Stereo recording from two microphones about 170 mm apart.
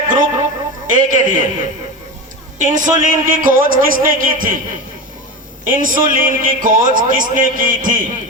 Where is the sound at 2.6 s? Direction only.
50° right (ahead or behind).